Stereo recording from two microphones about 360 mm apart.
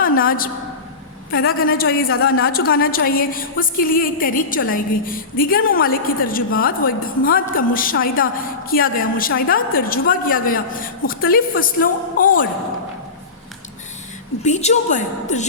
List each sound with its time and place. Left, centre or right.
0.2 s a woman's voice: left
14.4 s a woman's voice: centre